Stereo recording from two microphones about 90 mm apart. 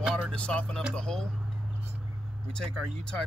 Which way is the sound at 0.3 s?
10° left (ahead or behind).